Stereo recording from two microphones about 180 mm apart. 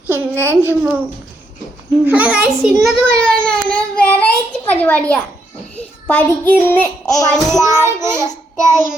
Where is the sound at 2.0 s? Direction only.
5° right (ahead or behind).